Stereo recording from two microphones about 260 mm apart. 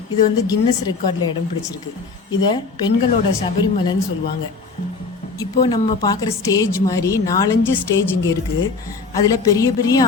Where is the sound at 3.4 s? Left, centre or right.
Centre.